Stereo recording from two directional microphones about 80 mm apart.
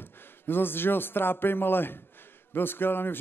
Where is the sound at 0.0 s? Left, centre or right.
Left.